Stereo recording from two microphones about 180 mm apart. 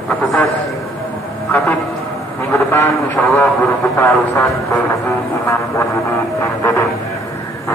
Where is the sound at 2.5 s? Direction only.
10° left (ahead or behind).